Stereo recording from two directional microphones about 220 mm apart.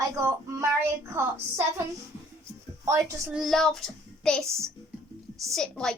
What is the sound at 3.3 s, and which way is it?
A child's voice, centre (ahead or behind).